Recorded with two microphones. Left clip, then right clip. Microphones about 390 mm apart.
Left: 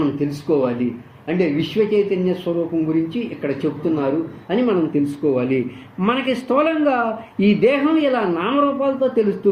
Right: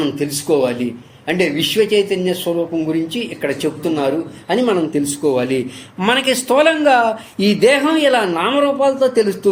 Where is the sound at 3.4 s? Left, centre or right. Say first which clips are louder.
Right 2 dB; right.